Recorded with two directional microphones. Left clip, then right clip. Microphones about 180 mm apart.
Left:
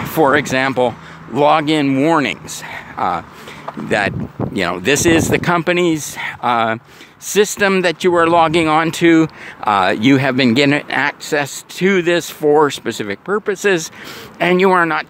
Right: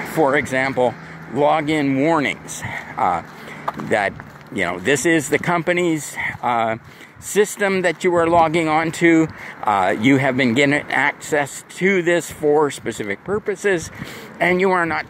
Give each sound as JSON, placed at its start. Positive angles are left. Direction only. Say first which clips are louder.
{"t": 0.1, "sound": "speech", "louder": "left 4 dB", "side_deg": 45}
{"t": 4.6, "sound": "speech", "louder": "left 3 dB", "side_deg": 40}